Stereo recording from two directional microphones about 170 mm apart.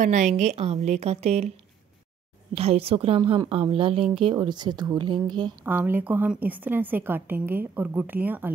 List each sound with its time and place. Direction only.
0.0 s a woman's voice: 45° right (ahead or behind)
2.5 s a woman's voice: 35° right (ahead or behind)
5.6 s a woman's voice: 10° right (ahead or behind)